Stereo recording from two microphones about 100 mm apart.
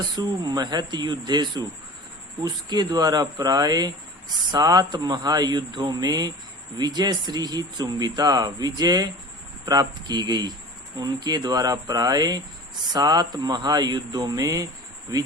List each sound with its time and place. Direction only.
0.0 s speech: 40° right (ahead or behind)